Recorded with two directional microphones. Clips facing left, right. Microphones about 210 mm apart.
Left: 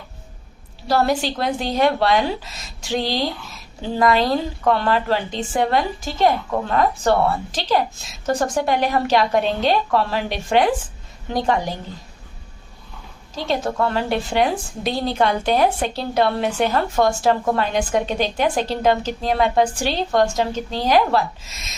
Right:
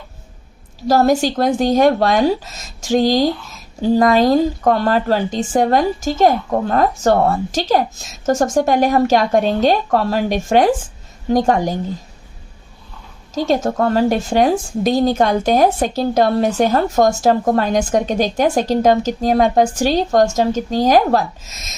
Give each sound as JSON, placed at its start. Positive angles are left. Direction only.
{"t": 0.9, "sound": "a woman's voice", "side_deg": -45}
{"t": 13.3, "sound": "a woman's voice", "side_deg": -45}